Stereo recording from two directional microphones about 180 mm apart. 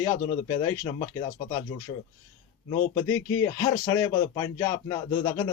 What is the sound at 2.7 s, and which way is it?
Speech, 20° left (ahead or behind).